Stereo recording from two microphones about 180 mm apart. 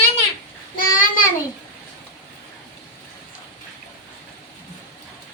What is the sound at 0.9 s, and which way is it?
Child singing, 50° left (ahead or behind).